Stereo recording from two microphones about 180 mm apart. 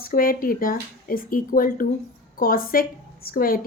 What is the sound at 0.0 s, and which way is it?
Speech, 55° left (ahead or behind).